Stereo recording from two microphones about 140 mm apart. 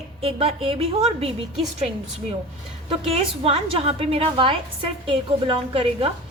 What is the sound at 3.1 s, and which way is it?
A woman's voice, 45° right (ahead or behind).